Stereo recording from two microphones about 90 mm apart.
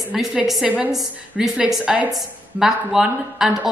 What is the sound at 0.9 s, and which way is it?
A woman's voice, 5° right (ahead or behind).